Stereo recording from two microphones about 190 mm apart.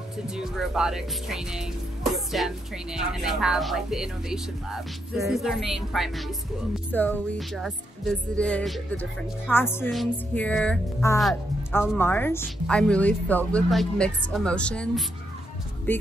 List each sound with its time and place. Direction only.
0.3 s a woman's voice: centre (ahead or behind)